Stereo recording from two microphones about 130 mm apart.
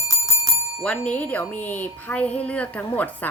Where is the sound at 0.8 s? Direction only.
10° left (ahead or behind).